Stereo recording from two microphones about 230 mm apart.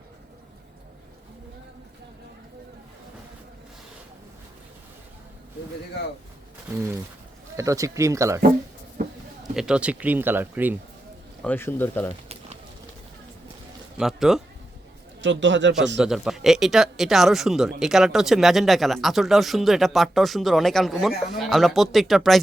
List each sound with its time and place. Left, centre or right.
7.5 s speech: centre
9.4 s speech: centre
11.4 s speech: centre
14.0 s speech: centre
15.2 s a man's voice: right
16.0 s speech: centre